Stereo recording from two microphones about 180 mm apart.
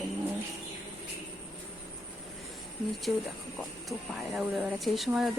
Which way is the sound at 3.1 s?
5° right (ahead or behind).